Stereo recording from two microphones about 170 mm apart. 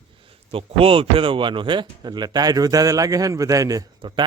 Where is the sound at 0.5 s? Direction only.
30° right (ahead or behind).